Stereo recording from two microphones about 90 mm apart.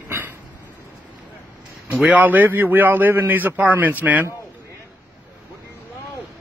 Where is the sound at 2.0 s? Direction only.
20° right (ahead or behind).